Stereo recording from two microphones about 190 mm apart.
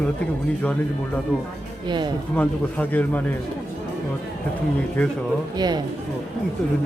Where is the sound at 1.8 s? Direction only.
25° right (ahead or behind).